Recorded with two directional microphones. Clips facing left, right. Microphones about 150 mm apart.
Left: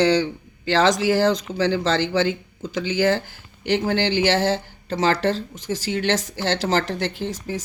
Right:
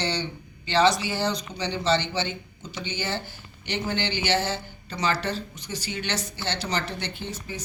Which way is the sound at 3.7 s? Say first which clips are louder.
Left 8 dB; 90° left.